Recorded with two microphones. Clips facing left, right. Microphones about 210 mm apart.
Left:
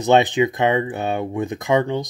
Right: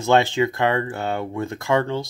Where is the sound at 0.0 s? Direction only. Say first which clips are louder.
Left 2 dB; 20° left (ahead or behind).